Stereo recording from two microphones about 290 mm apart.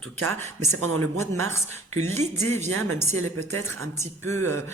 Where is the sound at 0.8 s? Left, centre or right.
Right.